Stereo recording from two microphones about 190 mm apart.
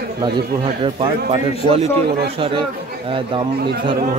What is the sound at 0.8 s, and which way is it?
Speech, 25° right (ahead or behind).